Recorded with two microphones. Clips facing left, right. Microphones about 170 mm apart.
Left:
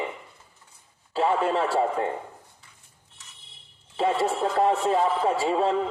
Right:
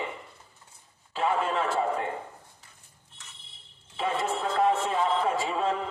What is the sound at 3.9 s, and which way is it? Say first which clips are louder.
A man's voice: left 5 dB; 35° left (ahead or behind).